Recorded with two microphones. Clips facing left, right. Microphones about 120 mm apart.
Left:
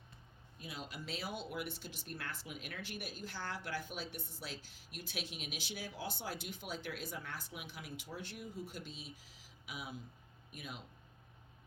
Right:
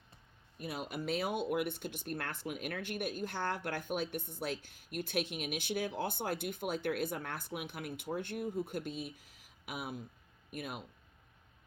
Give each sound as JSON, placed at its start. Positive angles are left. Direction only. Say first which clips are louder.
{"t": 0.6, "sound": "speech", "louder": "right 8 dB", "side_deg": -60}